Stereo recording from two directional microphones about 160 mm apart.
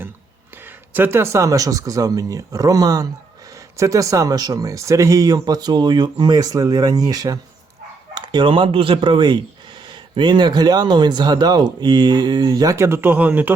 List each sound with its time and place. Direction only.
0.6 s speech: 15° right (ahead or behind)